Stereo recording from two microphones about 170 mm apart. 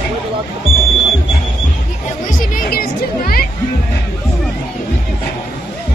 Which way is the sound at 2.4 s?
55° left (ahead or behind).